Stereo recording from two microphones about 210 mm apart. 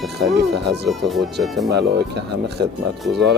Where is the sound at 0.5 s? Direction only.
55° right (ahead or behind).